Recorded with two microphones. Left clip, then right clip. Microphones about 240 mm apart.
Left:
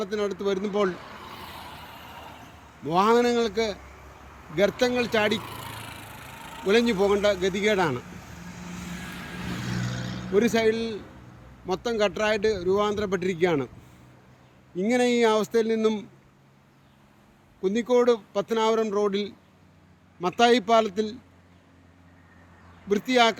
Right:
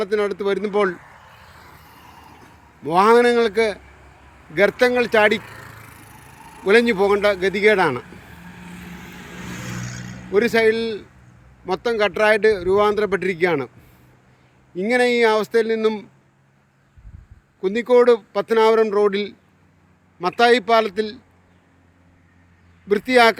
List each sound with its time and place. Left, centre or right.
0.0 s speech: centre
0.9 s vehicle: left
1.3 s vehicle: left
2.8 s speech: centre
6.7 s speech: centre
10.3 s speech: centre
14.8 s a man's voice: centre
17.6 s a man's voice: centre
22.9 s speech: centre